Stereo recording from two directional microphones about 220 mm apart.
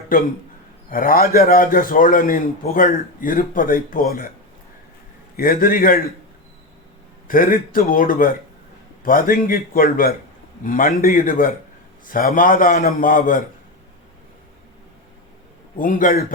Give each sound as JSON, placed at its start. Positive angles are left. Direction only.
{"t": 0.1, "sound": "a man's voice", "side_deg": 40}
{"t": 5.4, "sound": "a man's voice", "side_deg": 40}
{"t": 7.3, "sound": "a man's voice", "side_deg": 40}
{"t": 15.8, "sound": "a man's voice", "side_deg": 40}